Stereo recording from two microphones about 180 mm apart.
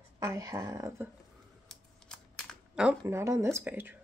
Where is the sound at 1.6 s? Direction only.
5° left (ahead or behind).